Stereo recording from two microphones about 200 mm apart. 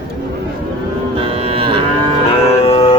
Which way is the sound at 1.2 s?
30° right (ahead or behind).